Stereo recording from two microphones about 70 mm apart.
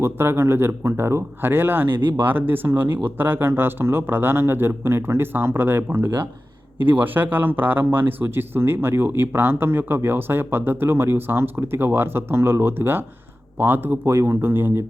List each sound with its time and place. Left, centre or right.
0.0 s speech: right